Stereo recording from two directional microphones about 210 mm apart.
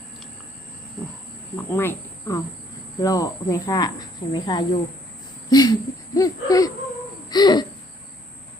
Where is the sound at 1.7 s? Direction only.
10° left (ahead or behind).